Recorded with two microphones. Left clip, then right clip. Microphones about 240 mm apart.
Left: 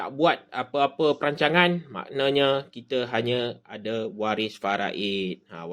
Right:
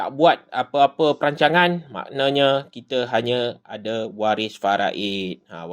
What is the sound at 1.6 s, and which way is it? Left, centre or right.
Speech, centre.